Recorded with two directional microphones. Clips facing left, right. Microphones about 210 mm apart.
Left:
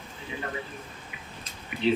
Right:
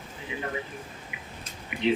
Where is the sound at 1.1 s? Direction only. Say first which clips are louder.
Right 1 dB; 15° right (ahead or behind).